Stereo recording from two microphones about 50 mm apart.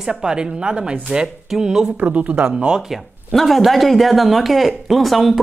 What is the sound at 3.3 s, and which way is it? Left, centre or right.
Speech, centre.